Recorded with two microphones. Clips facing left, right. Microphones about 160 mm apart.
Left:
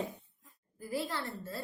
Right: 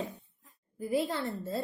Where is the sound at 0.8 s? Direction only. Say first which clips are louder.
Right 6 dB; 20° right (ahead or behind).